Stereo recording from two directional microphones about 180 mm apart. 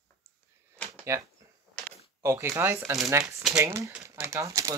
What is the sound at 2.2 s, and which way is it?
Speech, 15° right (ahead or behind).